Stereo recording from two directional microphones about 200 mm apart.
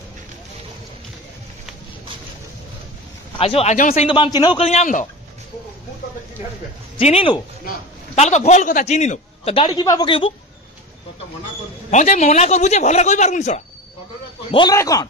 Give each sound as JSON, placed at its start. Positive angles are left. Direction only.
{"t": 3.3, "sound": "a man's voice", "side_deg": 30}
{"t": 7.0, "sound": "a man's voice", "side_deg": 30}
{"t": 11.9, "sound": "a man's voice", "side_deg": 35}
{"t": 14.5, "sound": "a man's voice", "side_deg": 20}